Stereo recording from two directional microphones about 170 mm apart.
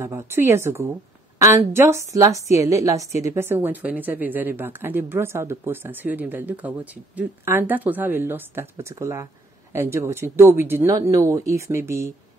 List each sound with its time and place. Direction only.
0.0 s a woman's voice: 15° right (ahead or behind)